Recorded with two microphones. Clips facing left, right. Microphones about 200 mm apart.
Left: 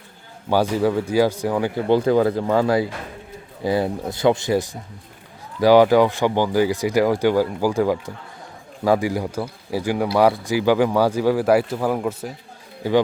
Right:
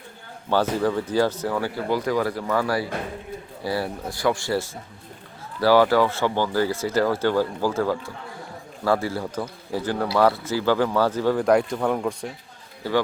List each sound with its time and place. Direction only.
0.5 s speech: 10° left (ahead or behind)